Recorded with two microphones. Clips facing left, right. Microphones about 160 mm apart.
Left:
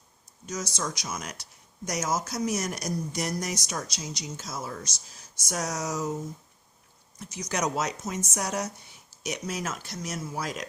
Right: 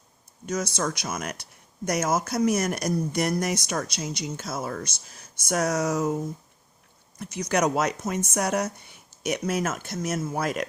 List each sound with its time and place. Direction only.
0.4 s speech: 55° right (ahead or behind)
7.2 s speech: 60° right (ahead or behind)